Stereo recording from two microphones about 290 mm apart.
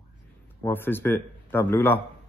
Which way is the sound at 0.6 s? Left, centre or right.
Centre.